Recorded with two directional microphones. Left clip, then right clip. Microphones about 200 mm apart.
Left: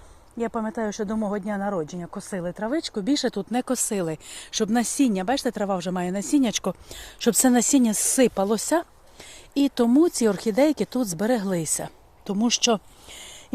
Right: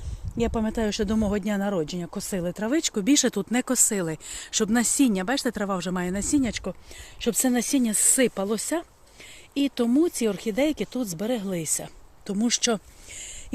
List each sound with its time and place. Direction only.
0.3 s speech: 20° right (ahead or behind); by 6.4 s centre (ahead or behind)
6.4 s speech: 20° left (ahead or behind)
12.2 s a sound: centre (ahead or behind)